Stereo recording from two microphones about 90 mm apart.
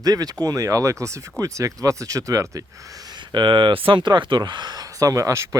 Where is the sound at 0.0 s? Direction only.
45° right (ahead or behind).